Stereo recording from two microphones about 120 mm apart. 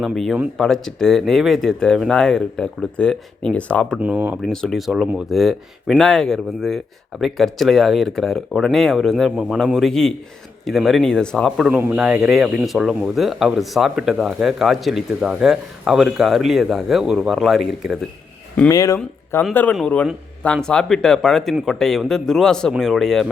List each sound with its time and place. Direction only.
0.0 s speech: centre (ahead or behind)
3.9 s speech: 10° right (ahead or behind)
4.4 s speech: 5° left (ahead or behind)
11.7 s speech: 15° right (ahead or behind)
18.7 s speech: 30° left (ahead or behind)
19.7 s a man's voice: 10° left (ahead or behind)